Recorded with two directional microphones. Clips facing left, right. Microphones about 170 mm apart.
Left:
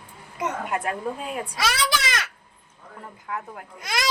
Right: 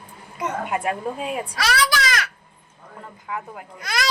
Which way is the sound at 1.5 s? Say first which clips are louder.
Right 3 dB; 25° left (ahead or behind).